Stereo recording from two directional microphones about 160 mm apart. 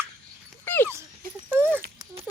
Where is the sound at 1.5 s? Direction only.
10° right (ahead or behind).